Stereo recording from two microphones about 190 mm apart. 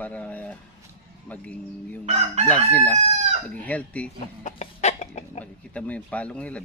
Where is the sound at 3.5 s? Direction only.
5° left (ahead or behind).